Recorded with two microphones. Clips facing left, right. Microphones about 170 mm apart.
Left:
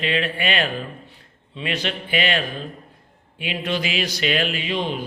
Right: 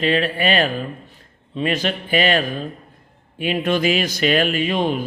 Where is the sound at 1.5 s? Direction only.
45° right (ahead or behind).